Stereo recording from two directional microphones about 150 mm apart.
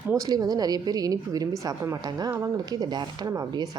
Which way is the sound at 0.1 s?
25° right (ahead or behind).